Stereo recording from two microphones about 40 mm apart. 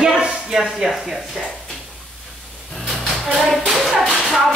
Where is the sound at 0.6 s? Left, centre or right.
Centre.